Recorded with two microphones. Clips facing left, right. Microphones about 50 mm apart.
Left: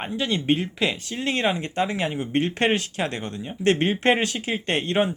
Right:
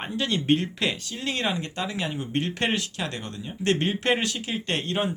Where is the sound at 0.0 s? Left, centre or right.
Centre.